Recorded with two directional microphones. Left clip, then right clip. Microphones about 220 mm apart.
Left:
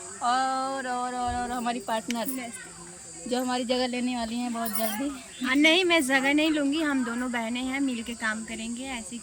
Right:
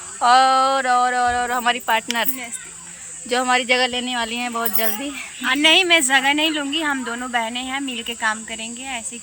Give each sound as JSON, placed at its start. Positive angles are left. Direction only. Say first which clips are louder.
{"t": 0.2, "sound": "speech", "louder": "right 12 dB", "side_deg": -35}
{"t": 3.2, "sound": "speech", "louder": "right 10 dB", "side_deg": -30}
{"t": 5.4, "sound": "speech", "louder": "right 7 dB", "side_deg": 5}